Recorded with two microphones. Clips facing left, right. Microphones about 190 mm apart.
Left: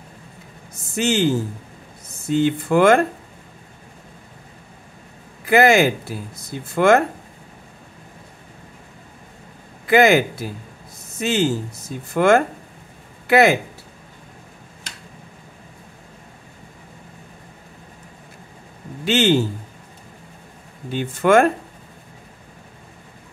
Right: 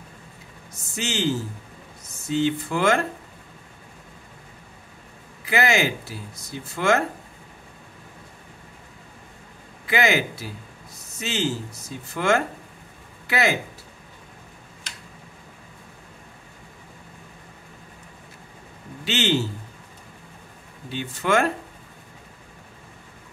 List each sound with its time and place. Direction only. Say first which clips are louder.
0.9 s speech: left 7 dB; 55° left (ahead or behind)
5.4 s speech: left 8 dB; 50° left (ahead or behind)
9.8 s speech: left 8 dB; 50° left (ahead or behind)
19.0 s speech: left 6 dB; 50° left (ahead or behind)
20.9 s speech: left 7 dB; 50° left (ahead or behind)